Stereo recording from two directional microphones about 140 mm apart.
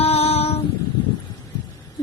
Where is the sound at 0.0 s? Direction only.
50° left (ahead or behind).